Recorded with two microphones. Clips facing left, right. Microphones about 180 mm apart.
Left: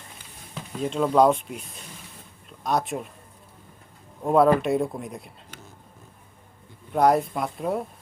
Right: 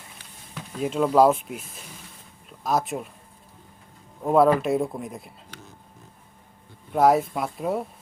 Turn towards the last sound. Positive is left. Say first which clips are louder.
# even
turn(degrees=0)  # may be behind; listen again after turning